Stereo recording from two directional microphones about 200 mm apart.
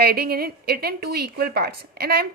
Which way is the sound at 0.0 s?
50° right (ahead or behind).